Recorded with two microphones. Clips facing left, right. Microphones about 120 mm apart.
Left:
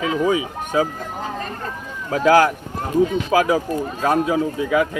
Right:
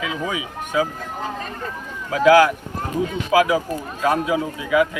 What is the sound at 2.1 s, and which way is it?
A man's voice, 40° left (ahead or behind).